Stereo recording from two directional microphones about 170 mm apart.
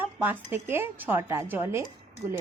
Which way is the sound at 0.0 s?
10° right (ahead or behind).